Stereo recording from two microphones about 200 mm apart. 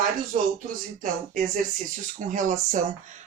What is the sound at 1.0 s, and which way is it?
Speech, 40° right (ahead or behind).